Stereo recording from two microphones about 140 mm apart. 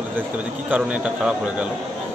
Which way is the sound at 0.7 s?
10° right (ahead or behind).